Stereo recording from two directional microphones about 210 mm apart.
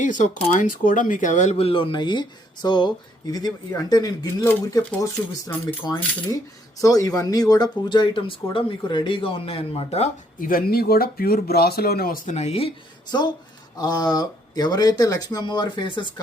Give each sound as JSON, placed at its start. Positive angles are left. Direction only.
{"t": 0.0, "sound": "speech", "side_deg": 35}
{"t": 10.5, "sound": "speech", "side_deg": 45}